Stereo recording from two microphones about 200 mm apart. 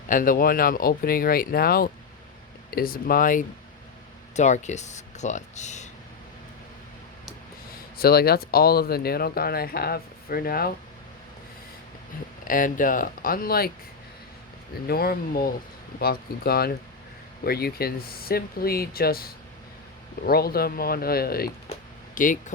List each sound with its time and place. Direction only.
0.1 s speech: 45° left (ahead or behind)
7.9 s speech: 50° left (ahead or behind)
12.5 s speech: 40° left (ahead or behind)
14.8 s speech: 50° left (ahead or behind)
21.7 s a sound: 40° left (ahead or behind)